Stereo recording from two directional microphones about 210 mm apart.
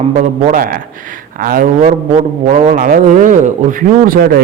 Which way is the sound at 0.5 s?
40° right (ahead or behind).